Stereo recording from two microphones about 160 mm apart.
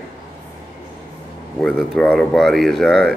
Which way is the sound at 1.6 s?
5° left (ahead or behind).